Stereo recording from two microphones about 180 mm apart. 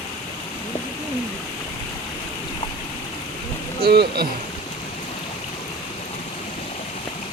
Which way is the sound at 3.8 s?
60° right (ahead or behind).